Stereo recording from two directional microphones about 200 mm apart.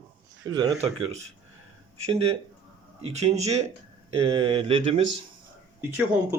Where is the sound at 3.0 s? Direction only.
30° right (ahead or behind).